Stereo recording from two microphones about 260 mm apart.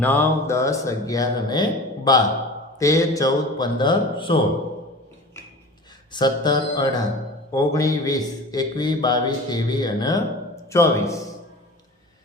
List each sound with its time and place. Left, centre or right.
0.0 s a man's voice: centre
6.1 s a man's voice: centre